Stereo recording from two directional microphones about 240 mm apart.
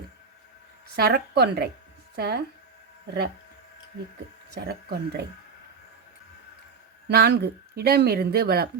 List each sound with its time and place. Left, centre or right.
0.9 s speech: right
4.5 s speech: right
7.1 s speech: right